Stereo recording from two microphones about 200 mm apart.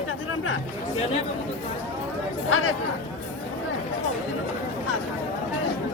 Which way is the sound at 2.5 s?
90° left.